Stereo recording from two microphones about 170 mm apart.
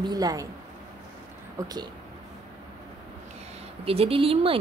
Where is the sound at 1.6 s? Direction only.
20° right (ahead or behind).